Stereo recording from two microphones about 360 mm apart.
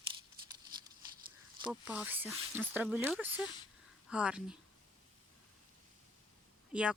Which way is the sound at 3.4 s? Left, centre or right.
Centre.